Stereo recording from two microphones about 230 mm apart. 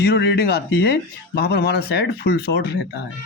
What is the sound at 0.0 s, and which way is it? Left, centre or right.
Speech, left.